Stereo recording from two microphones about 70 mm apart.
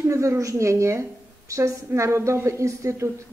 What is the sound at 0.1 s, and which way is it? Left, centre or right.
A woman's voice, right.